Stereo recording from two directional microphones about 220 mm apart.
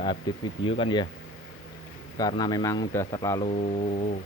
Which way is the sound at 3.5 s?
30° left (ahead or behind).